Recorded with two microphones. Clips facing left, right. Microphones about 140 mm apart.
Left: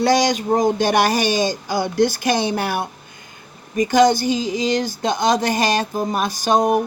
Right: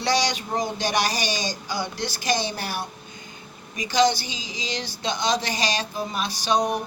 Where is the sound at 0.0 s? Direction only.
50° left (ahead or behind).